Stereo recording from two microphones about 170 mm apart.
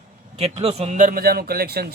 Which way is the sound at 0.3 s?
35° right (ahead or behind).